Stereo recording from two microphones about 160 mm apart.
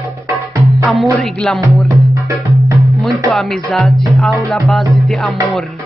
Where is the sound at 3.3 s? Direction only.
Centre (ahead or behind).